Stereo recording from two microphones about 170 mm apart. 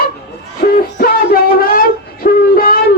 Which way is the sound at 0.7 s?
60° left (ahead or behind).